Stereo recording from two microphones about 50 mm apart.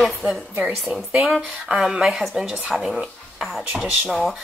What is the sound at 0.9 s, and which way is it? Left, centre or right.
Speech, right.